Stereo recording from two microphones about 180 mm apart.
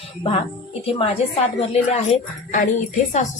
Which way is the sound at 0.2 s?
30° left (ahead or behind).